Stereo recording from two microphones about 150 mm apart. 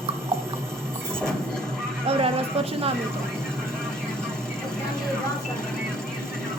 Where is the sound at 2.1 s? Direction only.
40° right (ahead or behind).